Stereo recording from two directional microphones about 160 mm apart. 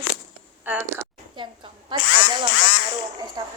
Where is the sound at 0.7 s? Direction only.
10° right (ahead or behind).